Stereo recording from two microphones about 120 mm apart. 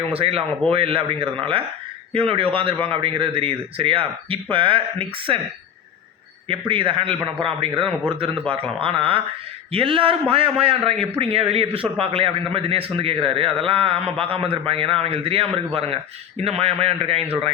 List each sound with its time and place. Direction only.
0.1 s a man's voice: 55° right (ahead or behind)
6.5 s a man's voice: 45° right (ahead or behind)